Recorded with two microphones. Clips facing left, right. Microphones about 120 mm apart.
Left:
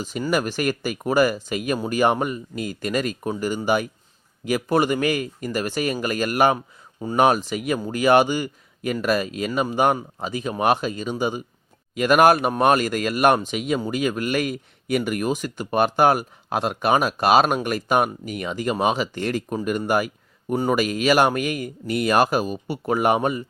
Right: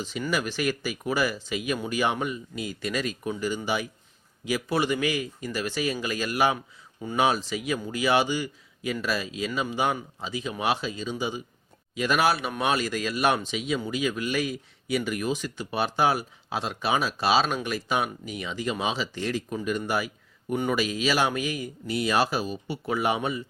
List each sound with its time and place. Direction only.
0.0 s speech: 45° left (ahead or behind)
7.0 s speech: 40° left (ahead or behind)
7.3 s speech: 50° left (ahead or behind)
20.5 s speech: 40° left (ahead or behind)